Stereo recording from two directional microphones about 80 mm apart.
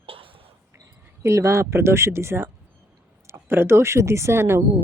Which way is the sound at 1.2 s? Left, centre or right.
Right.